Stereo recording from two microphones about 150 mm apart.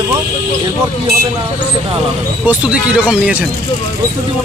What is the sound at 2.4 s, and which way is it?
Speech, 10° right (ahead or behind).